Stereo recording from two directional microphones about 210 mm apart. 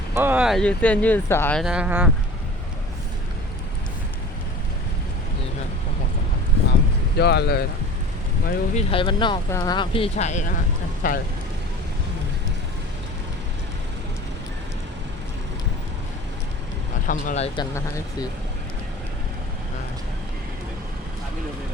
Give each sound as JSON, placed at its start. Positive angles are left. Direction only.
{"t": 0.1, "sound": "speech", "side_deg": -10}
{"t": 1.6, "sound": "speech", "side_deg": -5}
{"t": 7.2, "sound": "speech", "side_deg": 50}
{"t": 8.7, "sound": "speech", "side_deg": 25}
{"t": 17.1, "sound": "speech", "side_deg": 35}
{"t": 17.6, "sound": "speech", "side_deg": 15}